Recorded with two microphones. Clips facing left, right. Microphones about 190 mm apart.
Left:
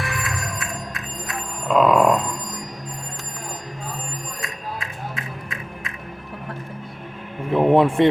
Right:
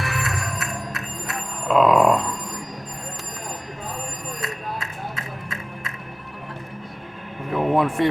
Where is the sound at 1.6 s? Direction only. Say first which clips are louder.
Even; centre (ahead or behind).